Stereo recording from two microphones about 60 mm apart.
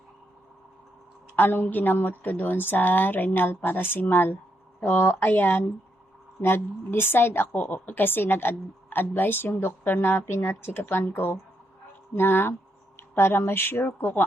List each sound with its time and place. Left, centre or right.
1.4 s a woman's voice: left
7.5 s a woman's voice: left